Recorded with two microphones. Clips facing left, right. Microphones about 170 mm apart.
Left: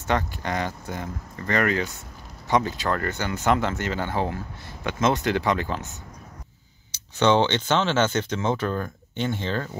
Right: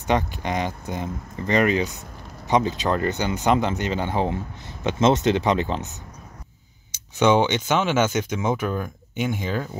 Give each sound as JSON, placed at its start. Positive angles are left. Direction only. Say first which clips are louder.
{"t": 0.0, "sound": "speech", "louder": "right 3 dB", "side_deg": -20}
{"t": 7.2, "sound": "speech", "louder": "right 1 dB", "side_deg": -10}